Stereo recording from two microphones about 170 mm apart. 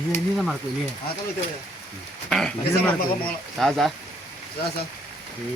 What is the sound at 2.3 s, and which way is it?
Speech, 5° left (ahead or behind).